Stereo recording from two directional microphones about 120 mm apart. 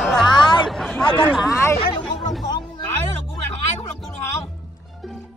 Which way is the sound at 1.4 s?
25° left (ahead or behind).